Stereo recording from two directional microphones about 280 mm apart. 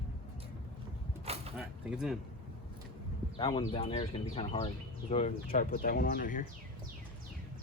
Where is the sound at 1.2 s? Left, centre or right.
Right.